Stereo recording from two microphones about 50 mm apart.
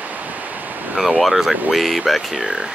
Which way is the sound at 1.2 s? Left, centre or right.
Centre.